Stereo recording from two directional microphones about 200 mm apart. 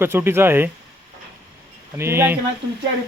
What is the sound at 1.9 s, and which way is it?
Speech, 10° right (ahead or behind).